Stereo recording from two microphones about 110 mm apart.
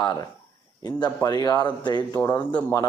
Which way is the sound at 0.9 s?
40° left (ahead or behind).